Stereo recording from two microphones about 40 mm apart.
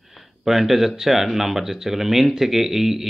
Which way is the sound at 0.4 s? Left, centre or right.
Centre.